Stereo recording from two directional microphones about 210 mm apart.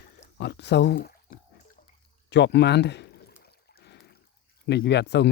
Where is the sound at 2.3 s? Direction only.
55° left (ahead or behind).